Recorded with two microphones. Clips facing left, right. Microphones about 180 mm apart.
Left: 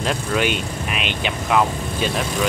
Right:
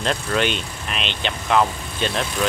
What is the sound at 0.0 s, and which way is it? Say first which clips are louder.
Speech: left 1 dB; 5° left (ahead or behind).